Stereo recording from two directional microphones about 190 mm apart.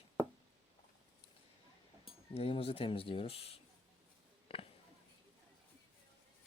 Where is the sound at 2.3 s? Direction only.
30° left (ahead or behind).